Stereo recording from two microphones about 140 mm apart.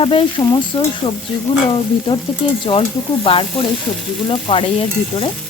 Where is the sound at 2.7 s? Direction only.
40° left (ahead or behind).